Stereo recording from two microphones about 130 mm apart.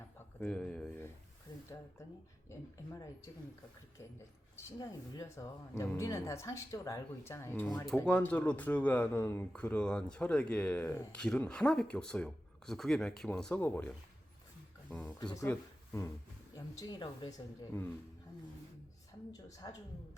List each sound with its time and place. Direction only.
0.3 s speech: 10° left (ahead or behind)
4.5 s speech: 25° left (ahead or behind)
9.5 s speech: 10° left (ahead or behind)
15.2 s speech: 30° left (ahead or behind)
16.6 s speech: 30° left (ahead or behind)